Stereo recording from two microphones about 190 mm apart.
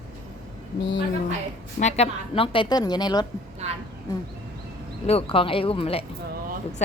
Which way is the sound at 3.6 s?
35° right (ahead or behind).